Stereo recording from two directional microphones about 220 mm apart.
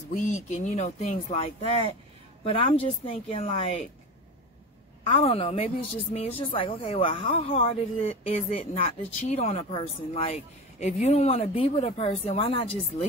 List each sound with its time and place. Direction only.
0.1 s a woman's voice: 30° left (ahead or behind)
5.0 s a woman's voice: 25° left (ahead or behind)